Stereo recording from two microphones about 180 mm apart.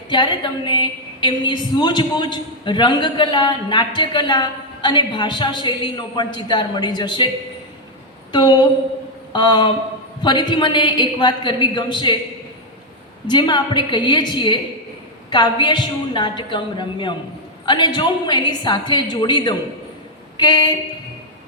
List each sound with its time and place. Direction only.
0.1 s a woman's voice: 25° left (ahead or behind)
8.3 s a woman's voice: 25° left (ahead or behind)
13.2 s a woman's voice: 25° left (ahead or behind)
20.3 s a sound: 25° left (ahead or behind)